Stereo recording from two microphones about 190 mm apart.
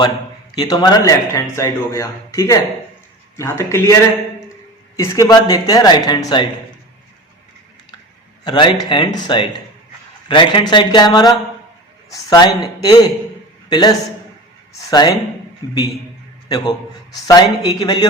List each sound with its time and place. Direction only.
0.5 s speech: 20° left (ahead or behind)
4.9 s a man's voice: 15° left (ahead or behind)
8.4 s a man's voice: 25° left (ahead or behind)
16.5 s a man's voice: 20° left (ahead or behind)